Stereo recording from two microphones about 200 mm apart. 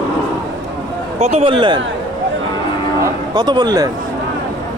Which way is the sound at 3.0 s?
20° right (ahead or behind).